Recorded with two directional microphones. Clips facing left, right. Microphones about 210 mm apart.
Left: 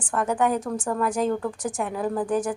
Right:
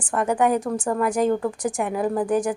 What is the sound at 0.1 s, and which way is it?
A woman's voice, 10° right (ahead or behind).